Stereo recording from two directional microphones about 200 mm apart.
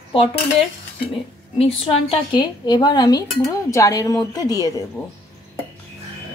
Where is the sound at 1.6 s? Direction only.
30° left (ahead or behind).